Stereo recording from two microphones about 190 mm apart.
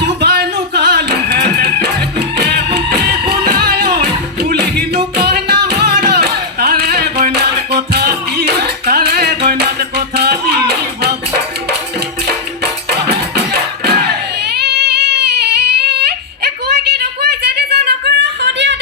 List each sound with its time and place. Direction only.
0.0 s music: 60° right (ahead or behind)
12.9 s music: 60° right (ahead or behind)